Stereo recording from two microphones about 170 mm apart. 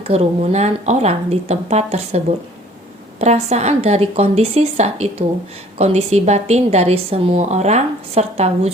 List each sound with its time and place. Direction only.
0.1 s a woman's voice: 35° right (ahead or behind)